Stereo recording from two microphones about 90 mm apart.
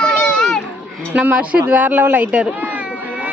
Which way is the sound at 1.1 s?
15° right (ahead or behind).